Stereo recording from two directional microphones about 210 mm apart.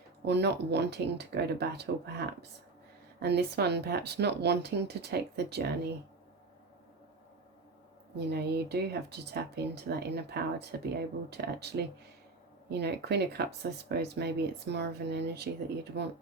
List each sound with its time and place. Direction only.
0.3 s speech: 50° right (ahead or behind)
8.1 s speech: 50° right (ahead or behind)